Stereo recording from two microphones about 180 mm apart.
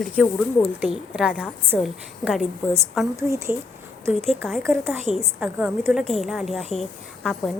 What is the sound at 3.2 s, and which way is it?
Speech, 15° right (ahead or behind).